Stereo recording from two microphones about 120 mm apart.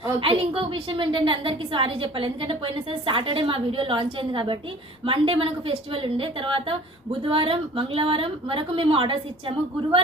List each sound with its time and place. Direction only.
0.2 s a woman's voice: 50° right (ahead or behind)